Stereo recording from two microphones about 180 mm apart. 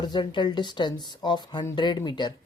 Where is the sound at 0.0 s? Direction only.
25° left (ahead or behind).